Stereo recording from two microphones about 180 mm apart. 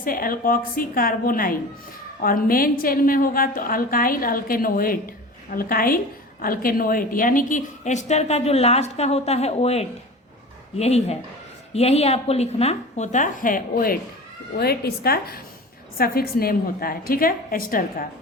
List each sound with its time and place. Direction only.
0.0 s a woman's voice: 50° left (ahead or behind)